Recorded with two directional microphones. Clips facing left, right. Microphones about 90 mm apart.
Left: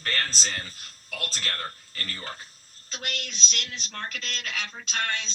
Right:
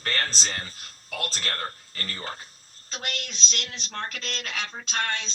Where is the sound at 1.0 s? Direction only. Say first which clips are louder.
Right 2 dB; 25° right (ahead or behind).